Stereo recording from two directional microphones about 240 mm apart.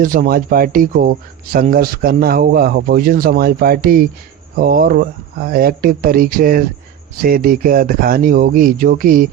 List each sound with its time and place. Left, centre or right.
0.0 s a man's voice: right